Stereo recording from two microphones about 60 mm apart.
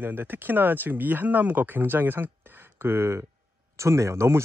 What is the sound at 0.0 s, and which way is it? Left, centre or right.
Speech, right.